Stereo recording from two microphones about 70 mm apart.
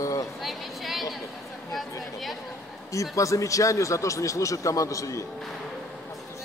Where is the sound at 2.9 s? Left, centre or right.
Left.